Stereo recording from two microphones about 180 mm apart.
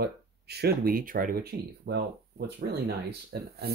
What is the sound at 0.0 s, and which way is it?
Speech, 60° right (ahead or behind).